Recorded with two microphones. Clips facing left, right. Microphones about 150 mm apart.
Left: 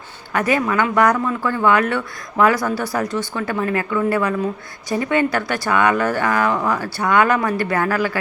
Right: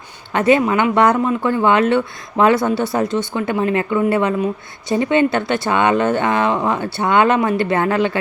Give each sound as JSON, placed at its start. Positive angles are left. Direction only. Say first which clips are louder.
{"t": 0.3, "sound": "speech", "louder": "right 4 dB", "side_deg": -25}